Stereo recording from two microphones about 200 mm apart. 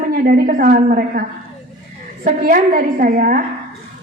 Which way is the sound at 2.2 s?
45° right (ahead or behind).